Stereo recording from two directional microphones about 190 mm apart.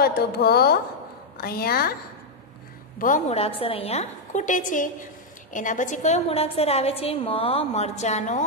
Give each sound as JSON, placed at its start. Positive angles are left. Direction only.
{"t": 0.0, "sound": "a woman's voice", "side_deg": 55}
{"t": 3.0, "sound": "a woman's voice", "side_deg": 40}